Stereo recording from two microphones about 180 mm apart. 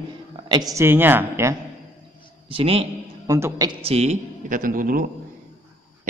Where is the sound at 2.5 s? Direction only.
30° right (ahead or behind).